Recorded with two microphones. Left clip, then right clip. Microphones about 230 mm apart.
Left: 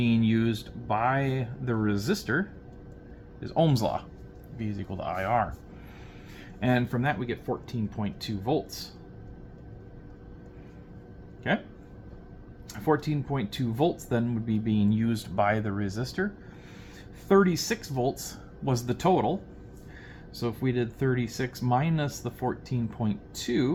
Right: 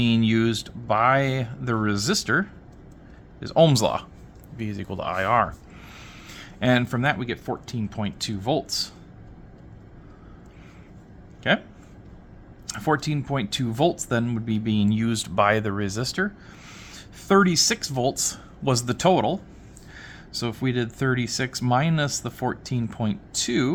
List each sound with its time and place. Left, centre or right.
0.0 s speech: right
12.6 s speech: right